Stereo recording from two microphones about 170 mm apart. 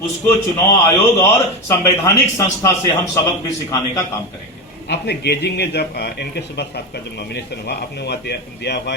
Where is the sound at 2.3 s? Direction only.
20° left (ahead or behind).